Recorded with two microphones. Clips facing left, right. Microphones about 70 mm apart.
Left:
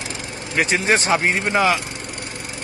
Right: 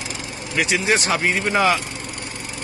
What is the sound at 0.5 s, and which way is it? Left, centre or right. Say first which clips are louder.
Speech: left 1 dB; left.